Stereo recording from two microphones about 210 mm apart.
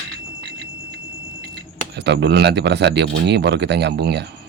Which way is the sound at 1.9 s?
55° right (ahead or behind).